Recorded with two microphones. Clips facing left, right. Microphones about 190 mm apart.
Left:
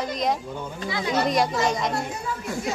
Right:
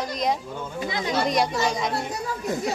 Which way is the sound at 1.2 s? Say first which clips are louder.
Left 1 dB; centre (ahead or behind).